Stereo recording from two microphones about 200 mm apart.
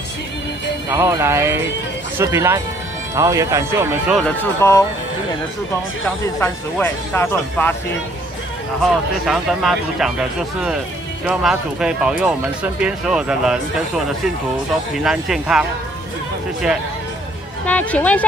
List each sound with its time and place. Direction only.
0.8 s speech: 15° right (ahead or behind)
4.1 s speech: 5° left (ahead or behind)
6.4 s speech: 10° left (ahead or behind)
9.2 s speech: centre (ahead or behind)
17.6 s speech: 5° left (ahead or behind)